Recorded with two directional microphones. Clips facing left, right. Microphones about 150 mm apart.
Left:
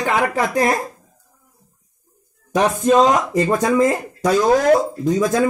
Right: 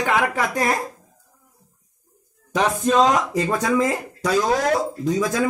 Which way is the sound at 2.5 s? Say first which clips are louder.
Left 4 dB; 45° left (ahead or behind).